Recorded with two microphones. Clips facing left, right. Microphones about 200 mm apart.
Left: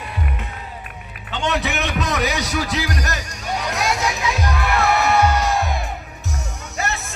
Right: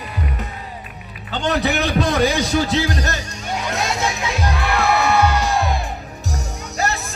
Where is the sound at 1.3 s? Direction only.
35° right (ahead or behind).